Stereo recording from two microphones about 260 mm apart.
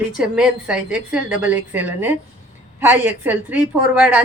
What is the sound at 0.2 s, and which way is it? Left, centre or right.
A woman's voice, centre.